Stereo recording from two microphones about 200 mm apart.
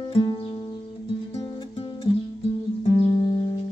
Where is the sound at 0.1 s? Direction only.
25° left (ahead or behind).